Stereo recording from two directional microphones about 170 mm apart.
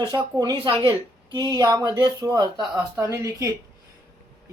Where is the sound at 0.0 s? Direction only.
20° right (ahead or behind).